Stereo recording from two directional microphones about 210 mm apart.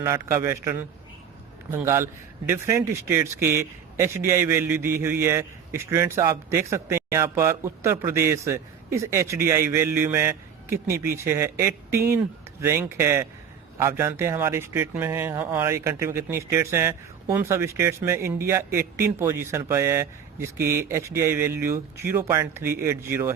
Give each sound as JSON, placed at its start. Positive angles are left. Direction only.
{"t": 0.0, "sound": "speech", "side_deg": -15}